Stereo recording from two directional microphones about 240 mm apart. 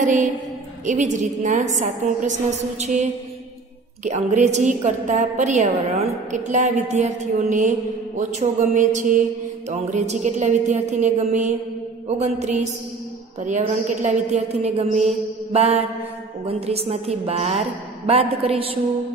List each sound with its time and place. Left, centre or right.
0.0 s a woman's voice: right